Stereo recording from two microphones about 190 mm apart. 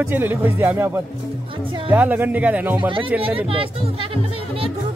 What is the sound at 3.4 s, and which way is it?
Speech, 30° right (ahead or behind).